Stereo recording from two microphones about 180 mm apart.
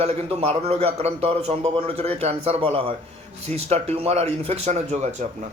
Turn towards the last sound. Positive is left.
turn(degrees=-40)  # may be behind; listen again after turning